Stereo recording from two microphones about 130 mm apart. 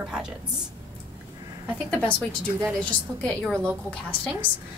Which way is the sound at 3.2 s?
5° left (ahead or behind).